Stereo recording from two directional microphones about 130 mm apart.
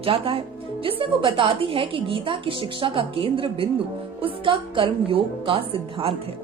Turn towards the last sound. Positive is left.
turn(degrees=-45)  # may be behind; listen again after turning